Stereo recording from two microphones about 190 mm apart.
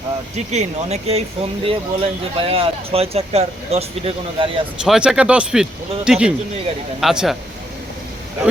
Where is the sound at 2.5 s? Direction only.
30° right (ahead or behind).